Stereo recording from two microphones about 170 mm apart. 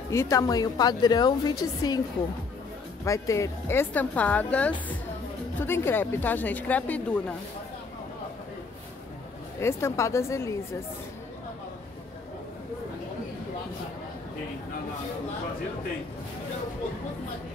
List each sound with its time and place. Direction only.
0.1 s a woman's voice: 20° left (ahead or behind)
3.1 s a woman's voice: 20° left (ahead or behind)
9.6 s a woman's voice: 15° left (ahead or behind)